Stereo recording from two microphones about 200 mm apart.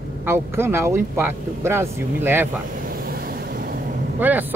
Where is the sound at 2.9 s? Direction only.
45° right (ahead or behind).